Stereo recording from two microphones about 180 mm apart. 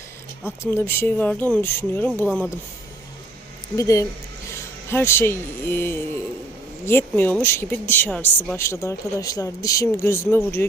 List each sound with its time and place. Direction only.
0.4 s speech: 15° left (ahead or behind)
3.8 s speech: 20° left (ahead or behind)